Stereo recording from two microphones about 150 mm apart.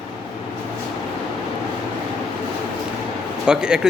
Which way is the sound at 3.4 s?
5° right (ahead or behind).